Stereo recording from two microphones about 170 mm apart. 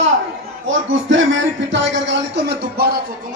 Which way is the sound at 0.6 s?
90° right.